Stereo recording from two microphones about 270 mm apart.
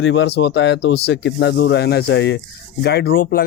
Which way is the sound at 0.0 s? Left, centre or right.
Left.